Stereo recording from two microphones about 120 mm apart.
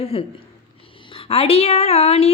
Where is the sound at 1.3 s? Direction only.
55° left (ahead or behind).